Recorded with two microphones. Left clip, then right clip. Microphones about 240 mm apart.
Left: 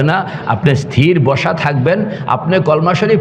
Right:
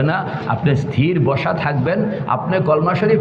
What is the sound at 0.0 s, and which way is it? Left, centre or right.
A man's voice, left.